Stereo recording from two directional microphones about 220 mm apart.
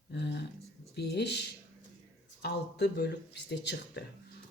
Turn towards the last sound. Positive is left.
turn(degrees=50)  # may be behind; listen again after turning